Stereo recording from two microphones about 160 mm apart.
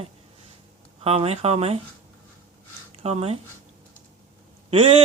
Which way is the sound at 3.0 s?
40° right (ahead or behind).